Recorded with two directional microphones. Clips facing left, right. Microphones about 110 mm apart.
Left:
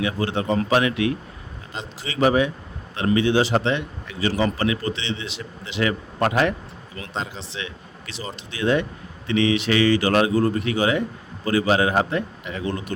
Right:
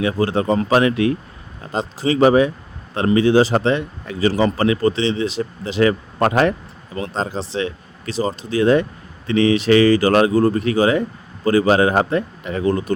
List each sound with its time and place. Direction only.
0.0 s speech: 40° right (ahead or behind)